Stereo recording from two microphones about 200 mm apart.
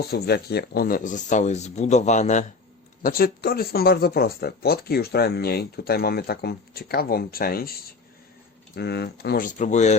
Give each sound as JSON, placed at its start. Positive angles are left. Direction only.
{"t": 0.0, "sound": "speech", "side_deg": 50}
{"t": 3.0, "sound": "speech", "side_deg": 45}